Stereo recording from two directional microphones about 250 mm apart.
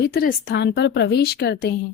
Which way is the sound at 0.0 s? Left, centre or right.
Left.